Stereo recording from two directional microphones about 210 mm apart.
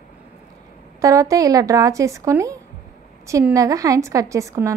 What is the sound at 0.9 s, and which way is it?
A woman's voice, 15° right (ahead or behind).